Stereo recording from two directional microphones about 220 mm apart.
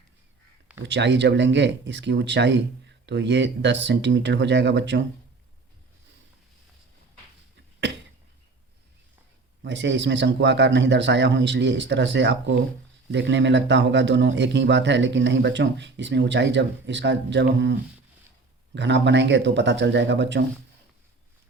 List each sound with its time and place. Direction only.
0.9 s a man's voice: 50° right (ahead or behind)
7.8 s a sound: 50° right (ahead or behind)
9.6 s a man's voice: 55° right (ahead or behind)